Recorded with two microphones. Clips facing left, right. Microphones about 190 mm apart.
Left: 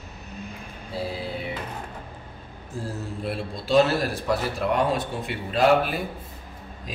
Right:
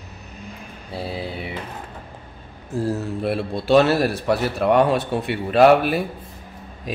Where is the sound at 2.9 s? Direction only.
65° right (ahead or behind).